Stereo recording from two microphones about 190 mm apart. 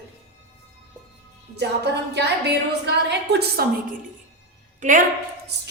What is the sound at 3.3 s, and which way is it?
Speech, 55° right (ahead or behind).